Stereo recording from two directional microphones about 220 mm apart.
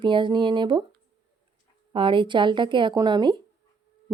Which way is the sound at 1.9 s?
25° right (ahead or behind).